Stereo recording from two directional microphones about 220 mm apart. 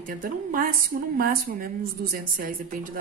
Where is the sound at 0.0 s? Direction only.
40° right (ahead or behind).